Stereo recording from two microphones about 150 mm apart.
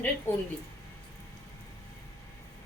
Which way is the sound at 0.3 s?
15° left (ahead or behind).